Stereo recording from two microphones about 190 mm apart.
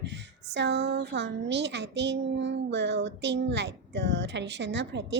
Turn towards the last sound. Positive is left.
turn(degrees=-65)  # may be behind; listen again after turning